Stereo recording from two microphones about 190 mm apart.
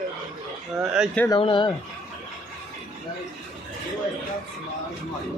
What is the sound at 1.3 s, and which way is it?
Speech, 25° left (ahead or behind).